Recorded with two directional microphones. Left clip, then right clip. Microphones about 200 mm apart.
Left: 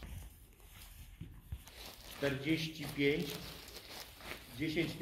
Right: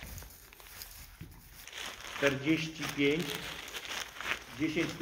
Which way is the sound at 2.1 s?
45° right (ahead or behind).